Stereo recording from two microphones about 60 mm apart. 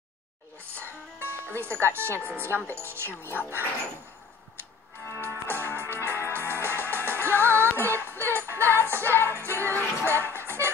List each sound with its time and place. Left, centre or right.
0.7 s speech: right
3.1 s speech: left
5.1 s music: right
10.0 s speech: right